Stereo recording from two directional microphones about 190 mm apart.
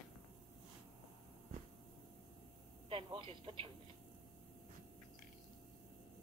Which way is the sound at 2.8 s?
25° right (ahead or behind).